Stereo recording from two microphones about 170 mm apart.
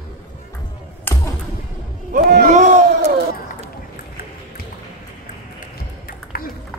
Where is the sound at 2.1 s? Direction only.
55° right (ahead or behind).